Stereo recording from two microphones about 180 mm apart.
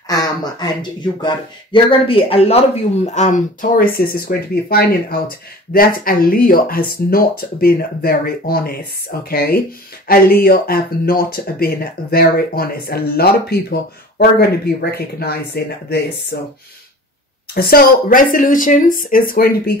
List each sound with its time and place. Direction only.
0.1 s a sound: 20° left (ahead or behind)
1.2 s speech: 30° left (ahead or behind); by 16.5 s 55° left (ahead or behind)
17.6 s speech: 55° left (ahead or behind)